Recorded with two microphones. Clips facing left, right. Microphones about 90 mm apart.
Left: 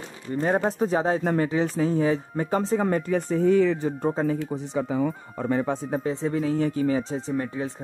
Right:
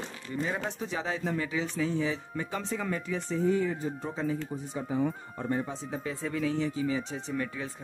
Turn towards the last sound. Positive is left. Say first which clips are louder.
# left 6 dB
turn(degrees=35)  # may be behind; listen again after turning